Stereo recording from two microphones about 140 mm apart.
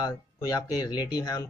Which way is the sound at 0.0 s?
25° left (ahead or behind).